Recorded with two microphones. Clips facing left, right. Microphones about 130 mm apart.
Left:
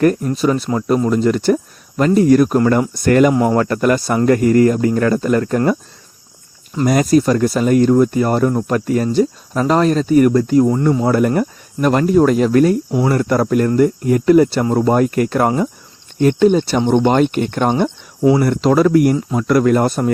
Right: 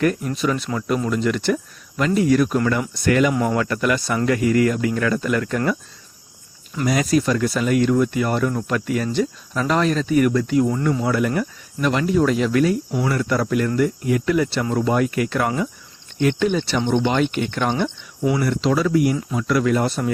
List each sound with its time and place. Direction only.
0.0 s speech: 40° left (ahead or behind)
6.8 s speech: 45° left (ahead or behind)
18.2 s speech: 30° left (ahead or behind)
18.4 s speech: 50° left (ahead or behind)